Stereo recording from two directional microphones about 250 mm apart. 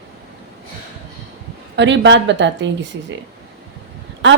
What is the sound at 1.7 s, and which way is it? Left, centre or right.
Speech, right.